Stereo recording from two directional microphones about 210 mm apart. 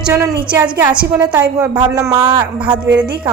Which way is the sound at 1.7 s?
15° right (ahead or behind).